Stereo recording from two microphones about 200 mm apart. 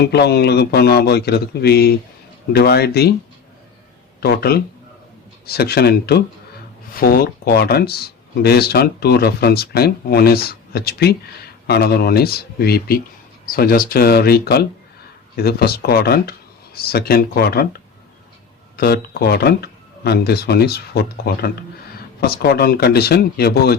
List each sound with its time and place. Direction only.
0.0 s speech: 55° left (ahead or behind)
4.2 s speech: 50° left (ahead or behind)
18.8 s speech: 50° left (ahead or behind)